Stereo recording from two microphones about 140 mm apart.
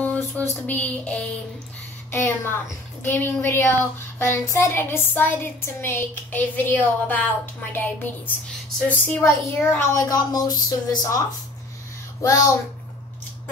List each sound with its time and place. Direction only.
0.0 s a sound: 10° left (ahead or behind)
2.0 s a woman's voice: 15° left (ahead or behind)
9.9 s speech: 25° left (ahead or behind)
12.2 s speech: 25° left (ahead or behind)